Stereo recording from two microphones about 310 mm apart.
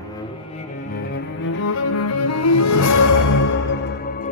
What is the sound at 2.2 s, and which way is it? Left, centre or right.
Music, left.